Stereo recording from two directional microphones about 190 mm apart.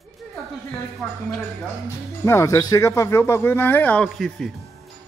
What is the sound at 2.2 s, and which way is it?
Speech, 15° left (ahead or behind).